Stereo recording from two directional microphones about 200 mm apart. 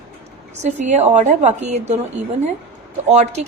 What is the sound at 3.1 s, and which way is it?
Speech, 35° right (ahead or behind).